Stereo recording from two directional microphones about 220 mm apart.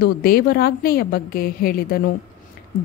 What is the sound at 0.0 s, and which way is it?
A woman's voice, 45° left (ahead or behind).